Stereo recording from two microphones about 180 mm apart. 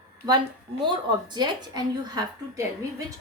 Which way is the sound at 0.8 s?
25° right (ahead or behind).